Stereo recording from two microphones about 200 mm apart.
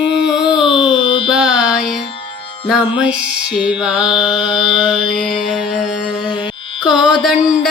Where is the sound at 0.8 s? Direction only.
25° left (ahead or behind).